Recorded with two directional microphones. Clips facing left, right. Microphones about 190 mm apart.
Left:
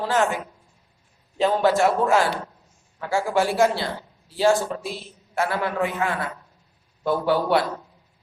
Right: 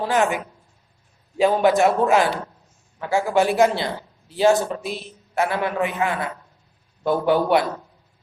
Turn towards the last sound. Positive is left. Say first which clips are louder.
# right 2 dB
turn(degrees=-20)  # may be behind; listen again after turning